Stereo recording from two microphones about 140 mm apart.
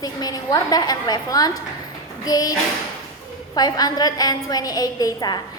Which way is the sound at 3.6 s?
30° left (ahead or behind).